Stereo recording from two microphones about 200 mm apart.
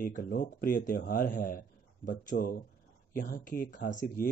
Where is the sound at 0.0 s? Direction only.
45° left (ahead or behind).